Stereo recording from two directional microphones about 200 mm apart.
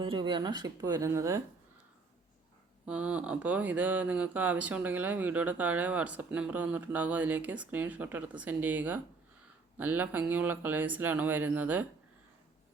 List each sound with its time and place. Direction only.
0.0 s speech: 25° right (ahead or behind)
2.8 s speech: 5° right (ahead or behind)